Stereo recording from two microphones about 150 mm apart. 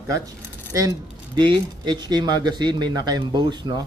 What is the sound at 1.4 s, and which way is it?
A man's voice, 30° right (ahead or behind).